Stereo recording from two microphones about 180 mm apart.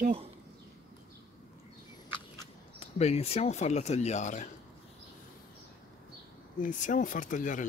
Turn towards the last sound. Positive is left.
turn(degrees=45)  # may be behind; listen again after turning